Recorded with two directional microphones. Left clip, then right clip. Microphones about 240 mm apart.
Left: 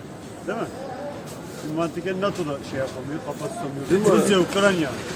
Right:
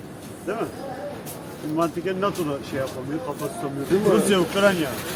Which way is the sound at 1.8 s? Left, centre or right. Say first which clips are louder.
Right 1 dB; centre.